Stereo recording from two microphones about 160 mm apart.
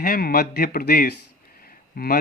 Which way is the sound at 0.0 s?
70° left (ahead or behind).